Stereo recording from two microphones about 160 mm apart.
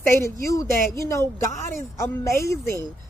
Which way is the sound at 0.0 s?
15° left (ahead or behind).